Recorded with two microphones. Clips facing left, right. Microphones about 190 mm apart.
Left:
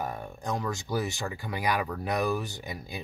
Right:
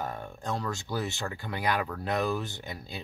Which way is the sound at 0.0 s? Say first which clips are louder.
Left 1 dB; 15° left (ahead or behind).